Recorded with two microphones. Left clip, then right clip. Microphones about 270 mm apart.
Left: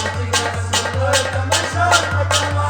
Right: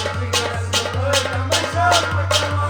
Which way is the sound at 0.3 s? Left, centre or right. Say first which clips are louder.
Left 1 dB; left.